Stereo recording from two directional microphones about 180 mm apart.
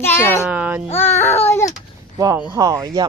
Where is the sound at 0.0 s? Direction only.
15° left (ahead or behind).